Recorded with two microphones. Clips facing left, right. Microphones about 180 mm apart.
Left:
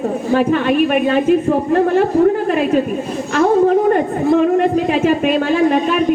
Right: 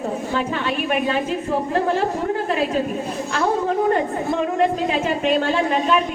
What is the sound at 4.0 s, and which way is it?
A woman's voice, 55° left (ahead or behind).